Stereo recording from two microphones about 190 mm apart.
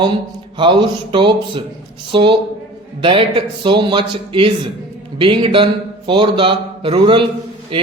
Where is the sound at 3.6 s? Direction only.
25° right (ahead or behind).